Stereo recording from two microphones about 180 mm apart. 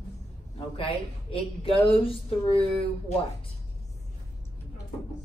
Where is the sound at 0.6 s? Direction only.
30° left (ahead or behind).